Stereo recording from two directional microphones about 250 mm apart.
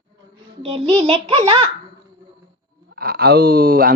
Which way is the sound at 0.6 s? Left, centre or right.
Right.